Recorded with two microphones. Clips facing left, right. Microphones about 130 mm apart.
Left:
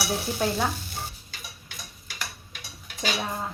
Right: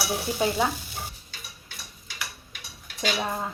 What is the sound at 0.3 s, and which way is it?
Speech, 5° right (ahead or behind).